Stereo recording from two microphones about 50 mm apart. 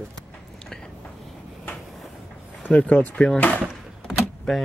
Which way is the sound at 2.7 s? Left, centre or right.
Left.